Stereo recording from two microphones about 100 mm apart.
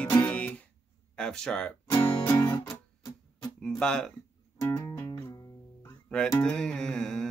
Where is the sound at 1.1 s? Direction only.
5° left (ahead or behind).